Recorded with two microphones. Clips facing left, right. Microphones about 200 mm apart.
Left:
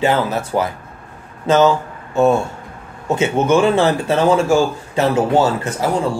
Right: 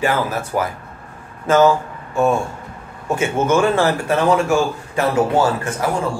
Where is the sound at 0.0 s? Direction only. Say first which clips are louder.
Left 3 dB; 20° left (ahead or behind).